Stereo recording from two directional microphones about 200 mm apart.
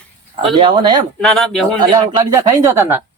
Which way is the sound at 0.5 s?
25° right (ahead or behind).